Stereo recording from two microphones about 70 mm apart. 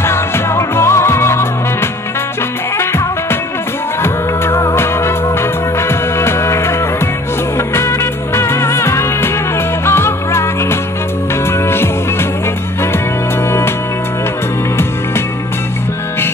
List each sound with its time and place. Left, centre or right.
0.0 s music: left